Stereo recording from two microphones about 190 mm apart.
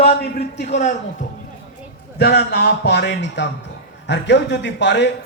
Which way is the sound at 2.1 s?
60° left (ahead or behind).